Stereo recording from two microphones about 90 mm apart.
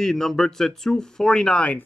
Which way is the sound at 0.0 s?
5° left (ahead or behind).